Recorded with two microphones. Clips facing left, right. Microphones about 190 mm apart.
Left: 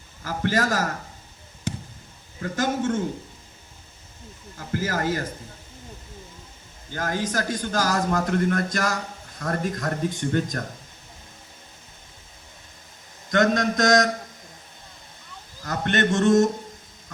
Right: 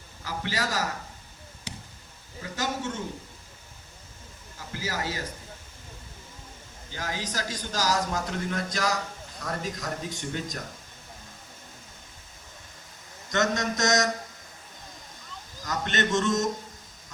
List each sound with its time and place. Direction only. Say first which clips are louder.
0.3 s a man's voice: left 7 dB; 50° left (ahead or behind)
1.7 s a sound: left 11 dB; 50° left (ahead or behind)
2.4 s a man's voice: left 7 dB; 50° left (ahead or behind)
4.5 s a man's voice: left 7 dB; 50° left (ahead or behind)
6.9 s a man's voice: left 7 dB; 50° left (ahead or behind)
13.6 s a man's voice: left 6 dB; 55° left (ahead or behind)
15.6 s a man's voice: left 5 dB; 55° left (ahead or behind)